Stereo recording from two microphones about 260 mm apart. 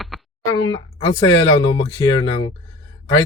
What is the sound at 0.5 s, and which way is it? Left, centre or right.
Speech, centre.